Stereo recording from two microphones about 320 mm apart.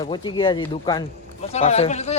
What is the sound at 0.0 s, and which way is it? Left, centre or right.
A man's voice, centre.